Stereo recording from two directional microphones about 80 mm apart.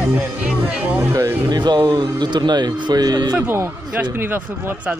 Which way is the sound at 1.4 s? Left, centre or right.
Right.